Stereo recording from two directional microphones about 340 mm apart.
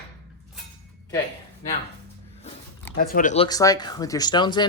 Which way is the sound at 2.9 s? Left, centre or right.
Left.